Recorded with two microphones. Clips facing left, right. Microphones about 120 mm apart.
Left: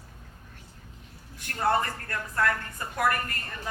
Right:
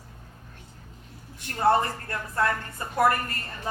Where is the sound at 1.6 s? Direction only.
25° right (ahead or behind).